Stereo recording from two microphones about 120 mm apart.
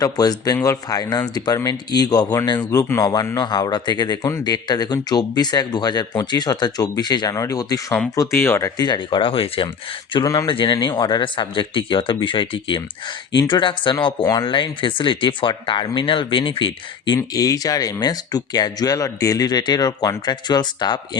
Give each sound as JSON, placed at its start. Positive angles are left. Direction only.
{"t": 0.0, "sound": "a man's voice", "side_deg": 30}
{"t": 8.8, "sound": "speech", "side_deg": 40}
{"t": 17.2, "sound": "speech", "side_deg": 30}